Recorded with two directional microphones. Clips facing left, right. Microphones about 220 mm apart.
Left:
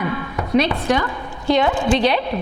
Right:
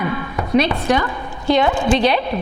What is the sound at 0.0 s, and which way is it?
A woman's voice, 15° right (ahead or behind).